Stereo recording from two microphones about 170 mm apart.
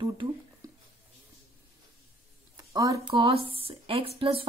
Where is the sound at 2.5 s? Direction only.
20° right (ahead or behind).